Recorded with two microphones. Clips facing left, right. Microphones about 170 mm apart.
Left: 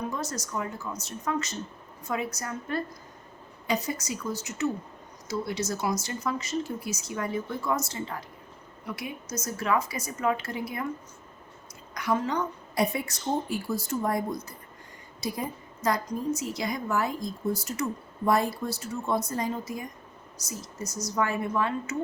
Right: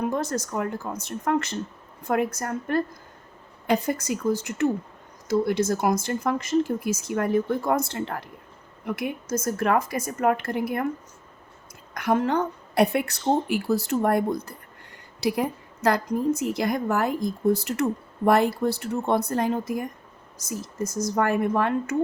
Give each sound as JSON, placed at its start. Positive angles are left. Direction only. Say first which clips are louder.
{"t": 0.0, "sound": "a woman's voice", "louder": "right 7 dB", "side_deg": -55}
{"t": 11.9, "sound": "a woman's voice", "louder": "right 5 dB", "side_deg": -55}
{"t": 15.2, "sound": "a woman's voice", "louder": "right 8 dB", "side_deg": -70}